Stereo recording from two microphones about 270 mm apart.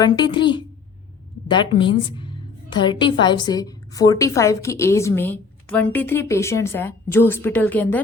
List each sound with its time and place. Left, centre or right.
0.0 s a woman's voice: centre